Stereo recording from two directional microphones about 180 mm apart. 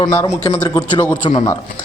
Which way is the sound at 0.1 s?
15° left (ahead or behind).